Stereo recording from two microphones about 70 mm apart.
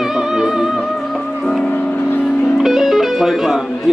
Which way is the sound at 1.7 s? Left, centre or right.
Left.